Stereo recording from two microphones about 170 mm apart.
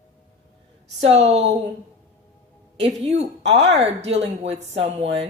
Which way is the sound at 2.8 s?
40° right (ahead or behind).